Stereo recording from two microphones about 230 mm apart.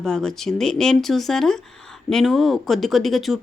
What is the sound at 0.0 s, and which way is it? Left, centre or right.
Speech, centre.